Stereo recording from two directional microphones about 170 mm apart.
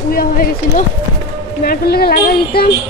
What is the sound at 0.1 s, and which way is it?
Speech, 60° left (ahead or behind).